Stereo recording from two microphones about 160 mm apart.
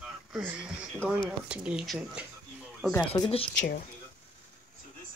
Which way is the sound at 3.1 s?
30° left (ahead or behind).